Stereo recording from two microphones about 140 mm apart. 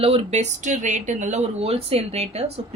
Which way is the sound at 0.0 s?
50° right (ahead or behind).